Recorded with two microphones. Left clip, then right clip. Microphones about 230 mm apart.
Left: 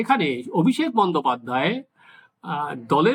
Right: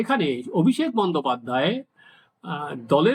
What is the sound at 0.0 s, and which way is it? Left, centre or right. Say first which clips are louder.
Speech: left 2 dB; centre.